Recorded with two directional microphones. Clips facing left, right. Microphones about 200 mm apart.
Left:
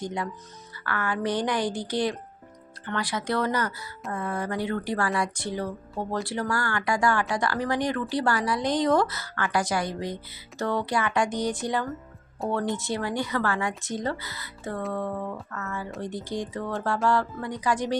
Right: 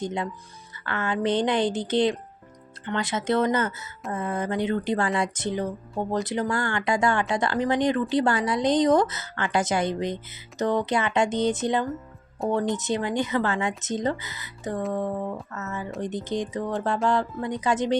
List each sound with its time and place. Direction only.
0.0 s speech: 20° right (ahead or behind)